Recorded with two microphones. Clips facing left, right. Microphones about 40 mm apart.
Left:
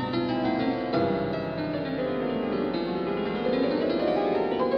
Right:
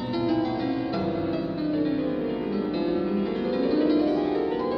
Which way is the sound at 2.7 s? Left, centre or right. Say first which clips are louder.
Right 3 dB; left.